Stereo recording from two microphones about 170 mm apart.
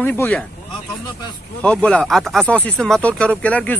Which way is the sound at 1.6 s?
5° left (ahead or behind).